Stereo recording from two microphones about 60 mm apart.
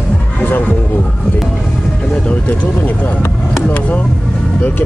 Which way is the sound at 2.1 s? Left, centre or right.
Centre.